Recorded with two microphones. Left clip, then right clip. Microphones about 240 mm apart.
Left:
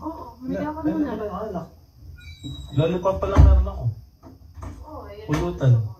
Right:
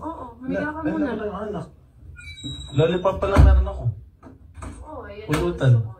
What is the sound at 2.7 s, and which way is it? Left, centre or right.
Speech, right.